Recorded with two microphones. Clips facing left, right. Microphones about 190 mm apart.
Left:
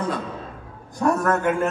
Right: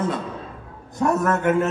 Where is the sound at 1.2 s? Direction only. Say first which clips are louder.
Right 1 dB; 20° right (ahead or behind).